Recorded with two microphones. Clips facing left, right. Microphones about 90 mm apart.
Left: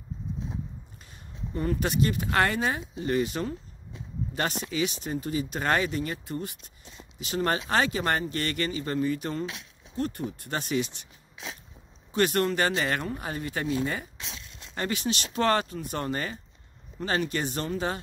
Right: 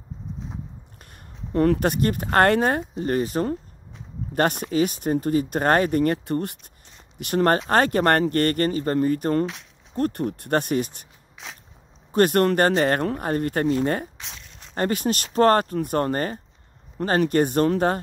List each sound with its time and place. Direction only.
1.5 s speech: 70° right (ahead or behind); by 11.1 s 45° right (ahead or behind)
12.1 s speech: 50° right (ahead or behind)